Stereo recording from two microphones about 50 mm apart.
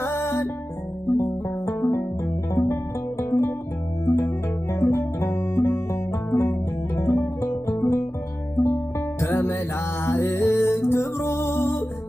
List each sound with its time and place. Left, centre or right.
0.0 s music: left
3.2 s music: left